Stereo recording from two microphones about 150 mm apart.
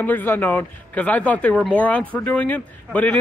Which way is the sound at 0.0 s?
15° left (ahead or behind).